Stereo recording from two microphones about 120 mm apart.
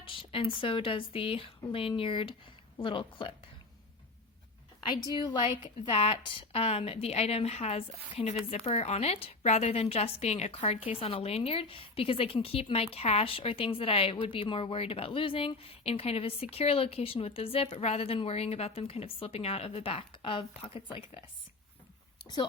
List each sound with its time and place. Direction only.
0.0 s a sound: 45° left (ahead or behind)
0.6 s a woman's voice: 45° left (ahead or behind)
5.1 s a woman's voice: 40° left (ahead or behind)